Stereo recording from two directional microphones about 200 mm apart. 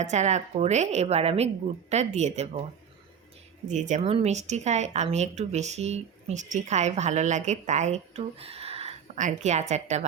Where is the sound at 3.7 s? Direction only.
35° right (ahead or behind).